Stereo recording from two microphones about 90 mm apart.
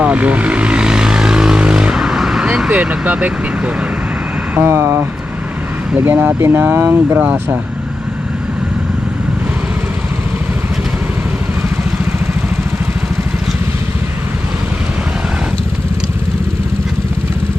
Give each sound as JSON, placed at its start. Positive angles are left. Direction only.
{"t": 0.0, "sound": "vehicle", "side_deg": -15}
{"t": 2.7, "sound": "speech", "side_deg": -15}
{"t": 4.5, "sound": "speech", "side_deg": -30}
{"t": 5.9, "sound": "speech", "side_deg": -15}